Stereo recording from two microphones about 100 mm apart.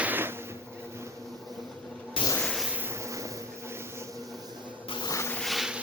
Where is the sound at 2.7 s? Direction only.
20° right (ahead or behind).